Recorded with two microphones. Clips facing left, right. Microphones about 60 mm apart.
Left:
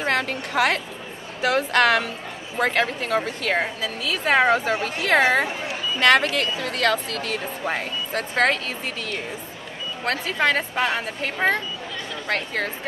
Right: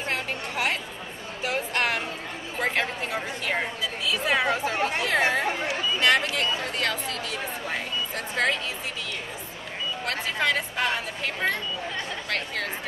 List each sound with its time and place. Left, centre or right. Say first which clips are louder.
0.0 s a sound: left 6 dB; left
1.4 s speech: left 8 dB; left
2.6 s a woman's voice: left 5 dB; left
4.3 s speech: left 7 dB; left
5.0 s speech: left 7 dB; left
10.0 s a woman's voice: left 5 dB; left